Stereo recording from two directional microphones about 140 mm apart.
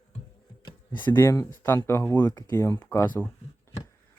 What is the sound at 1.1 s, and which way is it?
Speech, 20° left (ahead or behind).